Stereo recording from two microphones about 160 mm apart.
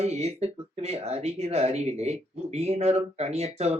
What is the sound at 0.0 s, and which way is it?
Speech, 40° right (ahead or behind).